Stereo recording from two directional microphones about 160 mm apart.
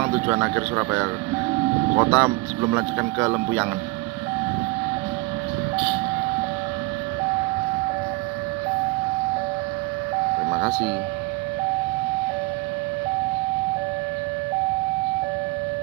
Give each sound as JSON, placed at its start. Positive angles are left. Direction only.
{"t": 0.0, "sound": "speech", "side_deg": -20}